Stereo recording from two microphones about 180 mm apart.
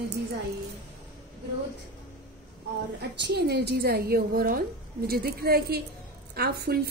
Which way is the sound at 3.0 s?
65° right (ahead or behind).